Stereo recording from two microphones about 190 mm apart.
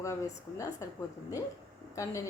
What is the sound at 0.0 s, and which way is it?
Speech, 15° left (ahead or behind).